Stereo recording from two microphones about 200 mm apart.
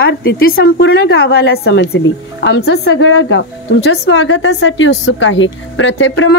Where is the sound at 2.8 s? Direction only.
75° left (ahead or behind).